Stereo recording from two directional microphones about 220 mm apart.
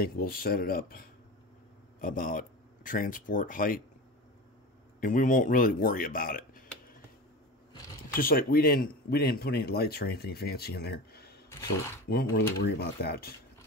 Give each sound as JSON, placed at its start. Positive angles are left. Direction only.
{"t": 0.0, "sound": "speech", "side_deg": 45}
{"t": 5.0, "sound": "speech", "side_deg": 40}
{"t": 8.2, "sound": "speech", "side_deg": 40}